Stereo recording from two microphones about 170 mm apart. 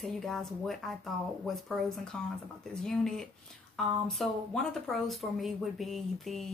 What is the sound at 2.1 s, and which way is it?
Speech, 5° left (ahead or behind).